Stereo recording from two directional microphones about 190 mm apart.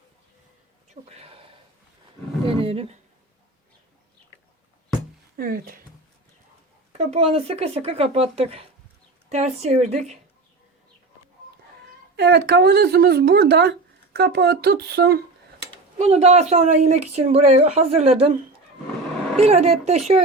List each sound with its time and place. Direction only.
1.0 s a sound: 30° right (ahead or behind)
2.4 s speech: 30° right (ahead or behind)
5.4 s speech: 50° right (ahead or behind)
6.9 s speech: 35° right (ahead or behind)
12.1 s speech: 55° right (ahead or behind)
16.0 s speech: 35° right (ahead or behind)
19.4 s speech: 35° right (ahead or behind)